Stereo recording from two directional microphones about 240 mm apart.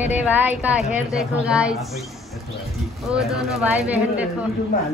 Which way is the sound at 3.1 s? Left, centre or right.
Centre.